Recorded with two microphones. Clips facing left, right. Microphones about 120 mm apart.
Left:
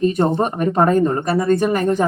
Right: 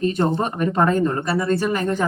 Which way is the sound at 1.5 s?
45° left (ahead or behind).